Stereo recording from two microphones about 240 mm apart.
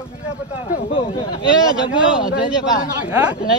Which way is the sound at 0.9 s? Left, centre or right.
Left.